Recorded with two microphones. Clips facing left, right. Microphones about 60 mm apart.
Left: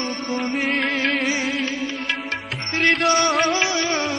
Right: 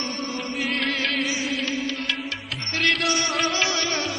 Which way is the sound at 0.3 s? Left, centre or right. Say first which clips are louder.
Left 7 dB; left.